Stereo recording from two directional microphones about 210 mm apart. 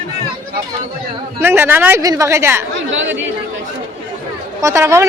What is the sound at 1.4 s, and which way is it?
A woman's voice, 10° right (ahead or behind).